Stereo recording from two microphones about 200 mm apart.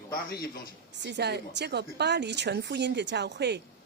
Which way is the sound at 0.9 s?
60° right (ahead or behind).